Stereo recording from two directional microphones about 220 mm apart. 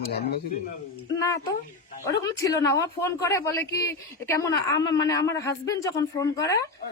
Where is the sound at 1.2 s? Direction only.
15° left (ahead or behind).